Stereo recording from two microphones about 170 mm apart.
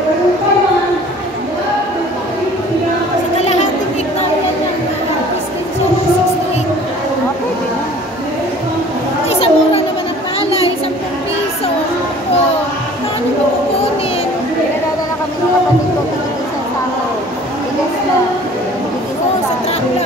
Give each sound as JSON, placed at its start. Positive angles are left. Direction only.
{"t": 9.3, "sound": "children playing", "side_deg": 35}